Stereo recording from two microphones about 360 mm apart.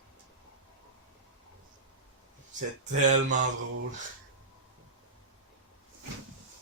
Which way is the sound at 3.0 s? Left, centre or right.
Right.